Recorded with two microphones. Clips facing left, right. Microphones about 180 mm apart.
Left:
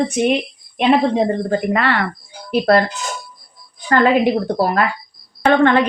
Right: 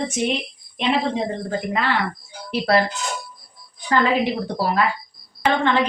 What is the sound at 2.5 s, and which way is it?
Speech, 50° left (ahead or behind).